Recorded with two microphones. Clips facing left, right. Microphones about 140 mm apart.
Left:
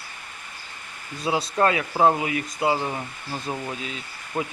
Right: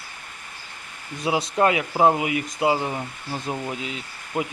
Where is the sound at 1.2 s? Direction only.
15° right (ahead or behind).